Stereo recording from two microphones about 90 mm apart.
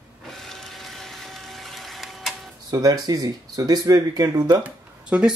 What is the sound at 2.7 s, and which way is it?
Speech, 45° right (ahead or behind).